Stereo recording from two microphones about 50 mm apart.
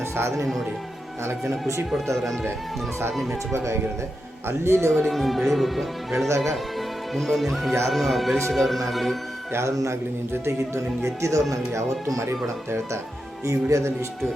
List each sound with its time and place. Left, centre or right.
0.2 s speech: right
2.1 s speech: centre
3.5 s speech: right
4.4 s speech: right
4.9 s a man's voice: centre
9.5 s speech: right
13.4 s speech: right